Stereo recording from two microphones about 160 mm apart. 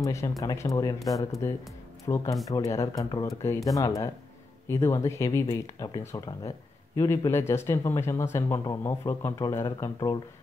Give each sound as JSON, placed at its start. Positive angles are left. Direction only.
{"t": 0.0, "sound": "speech", "side_deg": 20}